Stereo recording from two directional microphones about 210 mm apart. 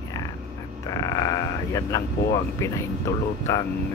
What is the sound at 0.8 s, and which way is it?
Speech, 15° left (ahead or behind).